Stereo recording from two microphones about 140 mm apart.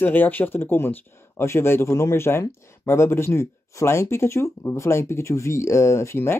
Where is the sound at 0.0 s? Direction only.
15° left (ahead or behind).